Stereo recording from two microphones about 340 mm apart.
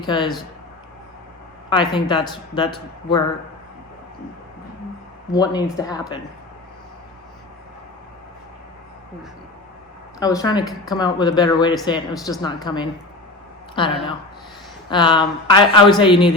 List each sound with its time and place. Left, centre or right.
0.0 s speech: centre
1.7 s speech: centre
5.3 s speech: centre
10.2 s speech: centre